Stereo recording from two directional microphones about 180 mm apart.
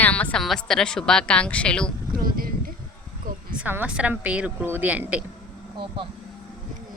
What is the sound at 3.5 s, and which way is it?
Speech, 10° right (ahead or behind).